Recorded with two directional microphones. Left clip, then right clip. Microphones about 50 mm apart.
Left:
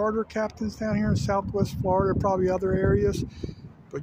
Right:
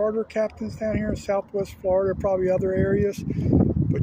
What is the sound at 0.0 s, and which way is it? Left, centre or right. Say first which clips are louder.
Speech: right 3 dB; centre.